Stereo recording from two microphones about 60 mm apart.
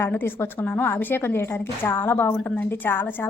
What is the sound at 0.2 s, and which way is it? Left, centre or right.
A woman's voice, left.